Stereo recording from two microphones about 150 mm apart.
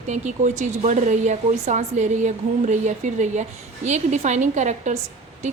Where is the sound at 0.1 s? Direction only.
50° right (ahead or behind).